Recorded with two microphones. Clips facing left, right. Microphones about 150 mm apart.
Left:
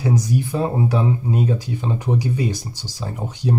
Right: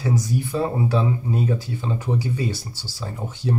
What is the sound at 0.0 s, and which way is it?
Speech, 15° left (ahead or behind).